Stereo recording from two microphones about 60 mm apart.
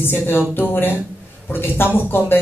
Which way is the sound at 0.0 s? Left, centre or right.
Left.